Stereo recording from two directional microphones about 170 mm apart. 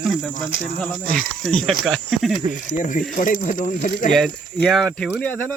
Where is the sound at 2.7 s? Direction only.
50° left (ahead or behind).